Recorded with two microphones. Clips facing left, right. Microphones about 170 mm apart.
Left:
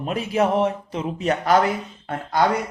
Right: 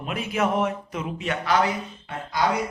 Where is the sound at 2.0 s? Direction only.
50° left (ahead or behind).